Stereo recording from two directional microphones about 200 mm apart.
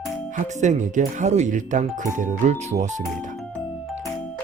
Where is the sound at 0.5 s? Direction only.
35° right (ahead or behind).